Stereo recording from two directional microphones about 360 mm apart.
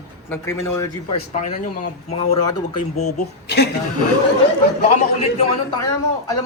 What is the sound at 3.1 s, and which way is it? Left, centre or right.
Speech, left.